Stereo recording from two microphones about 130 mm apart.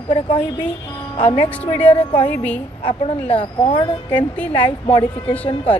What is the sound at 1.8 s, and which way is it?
Speech, 50° left (ahead or behind).